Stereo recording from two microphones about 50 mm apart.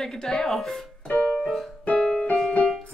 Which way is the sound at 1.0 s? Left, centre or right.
Left.